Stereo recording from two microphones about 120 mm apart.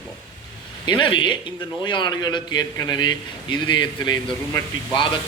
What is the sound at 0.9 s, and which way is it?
A man's voice, 40° left (ahead or behind).